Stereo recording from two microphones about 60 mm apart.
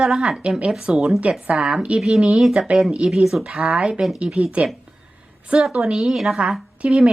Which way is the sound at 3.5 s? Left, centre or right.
Centre.